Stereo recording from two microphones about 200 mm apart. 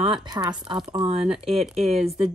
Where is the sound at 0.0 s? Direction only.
25° right (ahead or behind).